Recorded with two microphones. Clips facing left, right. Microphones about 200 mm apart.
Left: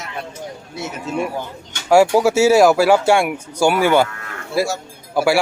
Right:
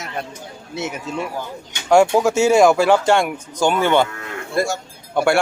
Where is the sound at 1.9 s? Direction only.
5° left (ahead or behind).